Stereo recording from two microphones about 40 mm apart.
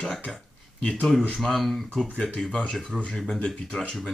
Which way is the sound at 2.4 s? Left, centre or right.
Centre.